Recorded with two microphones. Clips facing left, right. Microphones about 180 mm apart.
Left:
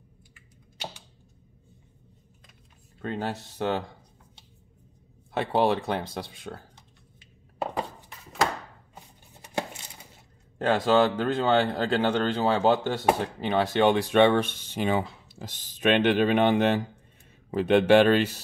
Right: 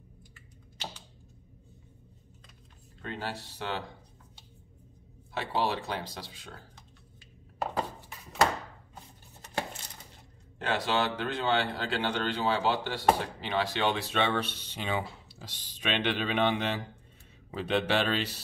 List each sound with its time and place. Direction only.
3.0 s speech: 45° left (ahead or behind)
5.3 s speech: 50° left (ahead or behind)
9.4 s a sound: 10° left (ahead or behind)
10.6 s speech: 45° left (ahead or behind)